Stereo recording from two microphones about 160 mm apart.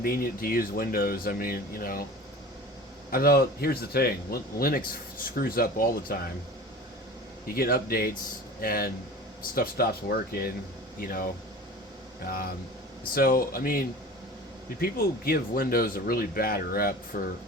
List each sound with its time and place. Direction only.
0.0 s speech: 65° left (ahead or behind)
3.1 s speech: 70° left (ahead or behind)
7.4 s speech: 70° left (ahead or behind)
11.0 s speech: 60° left (ahead or behind)